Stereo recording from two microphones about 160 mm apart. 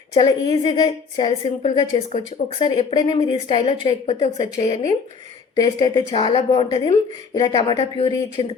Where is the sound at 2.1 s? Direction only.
45° left (ahead or behind).